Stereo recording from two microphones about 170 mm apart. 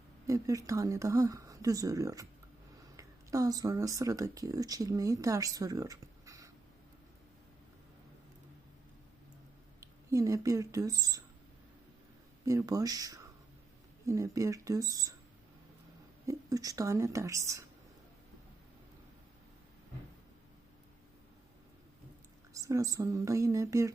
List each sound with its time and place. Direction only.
0.3 s speech: 20° right (ahead or behind)
9.8 s speech: 20° right (ahead or behind)
12.5 s speech: 20° right (ahead or behind)
16.2 s speech: 20° right (ahead or behind)
22.5 s speech: 20° right (ahead or behind)